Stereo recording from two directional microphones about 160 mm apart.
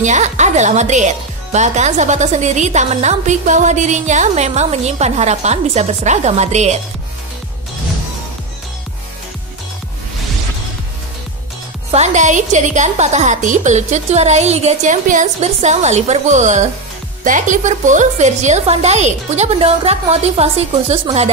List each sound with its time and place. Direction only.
0.0 s a woman's voice: 45° right (ahead or behind)
11.9 s a woman's voice: 45° right (ahead or behind)